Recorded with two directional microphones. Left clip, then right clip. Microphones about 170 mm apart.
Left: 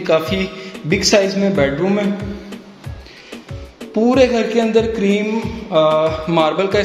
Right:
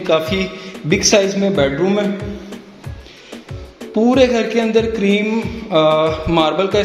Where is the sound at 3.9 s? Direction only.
Centre (ahead or behind).